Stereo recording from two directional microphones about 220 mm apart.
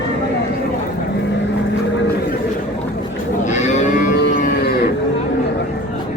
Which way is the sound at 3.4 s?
30° left (ahead or behind).